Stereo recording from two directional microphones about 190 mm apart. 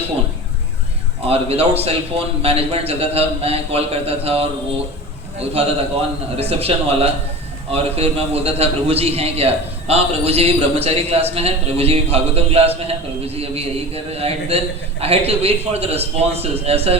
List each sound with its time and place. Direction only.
1.3 s a man's voice: 30° right (ahead or behind)